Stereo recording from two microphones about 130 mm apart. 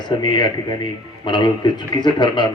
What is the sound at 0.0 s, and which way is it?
Speech, 35° left (ahead or behind).